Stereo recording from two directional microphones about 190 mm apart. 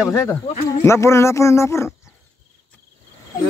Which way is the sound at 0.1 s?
15° left (ahead or behind).